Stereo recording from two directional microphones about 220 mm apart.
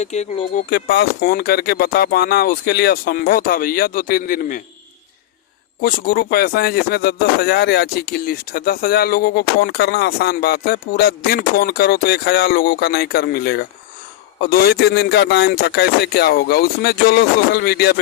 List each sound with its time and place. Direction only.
0.0 s speech: 30° left (ahead or behind)
0.7 s speech: 45° left (ahead or behind)
5.8 s speech: 40° left (ahead or behind)